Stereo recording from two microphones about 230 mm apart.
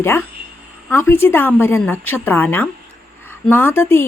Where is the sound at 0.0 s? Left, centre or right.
Centre.